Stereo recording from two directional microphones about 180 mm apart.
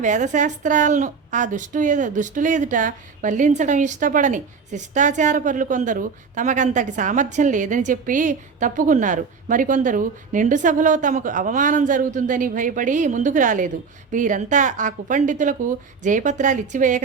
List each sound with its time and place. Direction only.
0.0 s a woman's voice: 45° right (ahead or behind)